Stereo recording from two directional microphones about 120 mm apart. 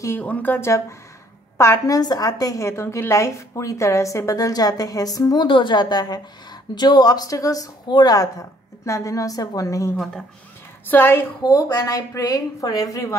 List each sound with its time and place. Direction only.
0.2 s a woman's voice: 10° left (ahead or behind)
11.4 s speech: 30° left (ahead or behind)